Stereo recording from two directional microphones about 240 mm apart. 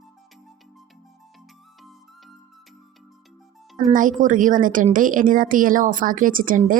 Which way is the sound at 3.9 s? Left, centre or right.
Right.